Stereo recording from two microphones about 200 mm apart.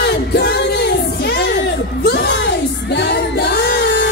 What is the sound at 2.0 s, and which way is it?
Singing, 55° left (ahead or behind).